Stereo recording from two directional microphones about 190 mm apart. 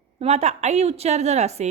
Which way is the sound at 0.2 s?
35° right (ahead or behind).